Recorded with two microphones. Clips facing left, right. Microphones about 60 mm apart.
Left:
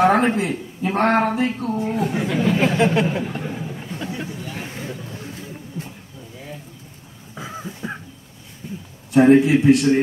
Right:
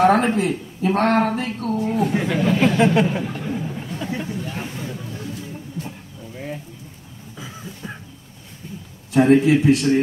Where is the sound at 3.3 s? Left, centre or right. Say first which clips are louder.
Right 1 dB; centre.